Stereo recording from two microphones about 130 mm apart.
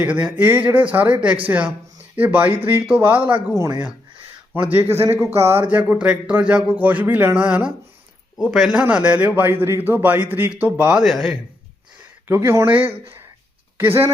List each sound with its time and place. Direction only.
0.0 s speech: 10° right (ahead or behind)
3.5 s speech: 25° right (ahead or behind)
11.0 s speech: centre (ahead or behind)
12.3 s speech: 20° right (ahead or behind)